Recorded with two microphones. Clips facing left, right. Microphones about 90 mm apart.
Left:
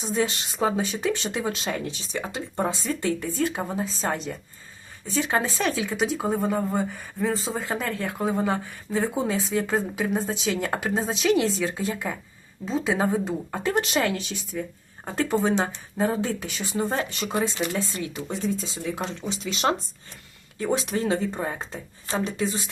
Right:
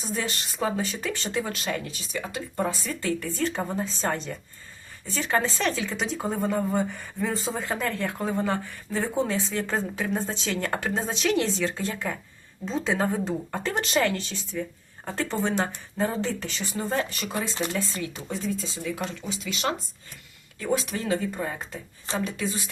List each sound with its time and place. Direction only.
0.0 s speech: 20° left (ahead or behind); by 4.4 s 5° left (ahead or behind)
5.0 s speech: 15° left (ahead or behind)
14.5 s speech: 20° left (ahead or behind)